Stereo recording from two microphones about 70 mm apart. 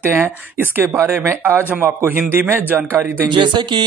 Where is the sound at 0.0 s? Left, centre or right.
Right.